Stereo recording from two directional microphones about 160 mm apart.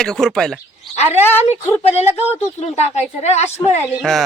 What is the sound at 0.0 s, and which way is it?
Speech, 5° left (ahead or behind).